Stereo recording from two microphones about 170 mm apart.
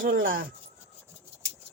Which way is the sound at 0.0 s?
60° right (ahead or behind).